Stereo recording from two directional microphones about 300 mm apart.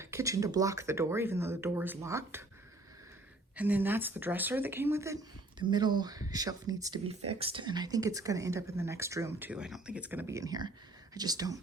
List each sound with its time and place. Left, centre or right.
0.0 s speech: centre
3.5 s speech: centre